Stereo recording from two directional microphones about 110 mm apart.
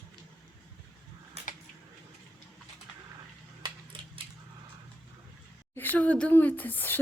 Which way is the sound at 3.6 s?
55° right (ahead or behind).